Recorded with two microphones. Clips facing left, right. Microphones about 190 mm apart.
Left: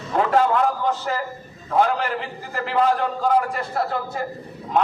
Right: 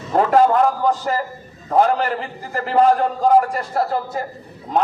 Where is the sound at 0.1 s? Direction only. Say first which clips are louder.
Right 4 dB; 40° right (ahead or behind).